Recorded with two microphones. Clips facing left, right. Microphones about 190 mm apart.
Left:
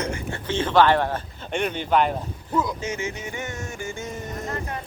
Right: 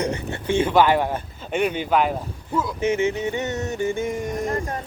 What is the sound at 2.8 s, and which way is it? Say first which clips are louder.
Music: right 9 dB; 20° right (ahead or behind).